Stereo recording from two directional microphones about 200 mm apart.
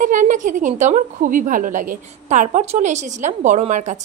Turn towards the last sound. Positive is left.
turn(degrees=-35)  # may be behind; listen again after turning